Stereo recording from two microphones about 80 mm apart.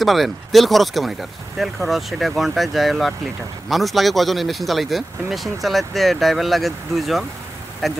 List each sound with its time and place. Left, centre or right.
0.0 s speech: centre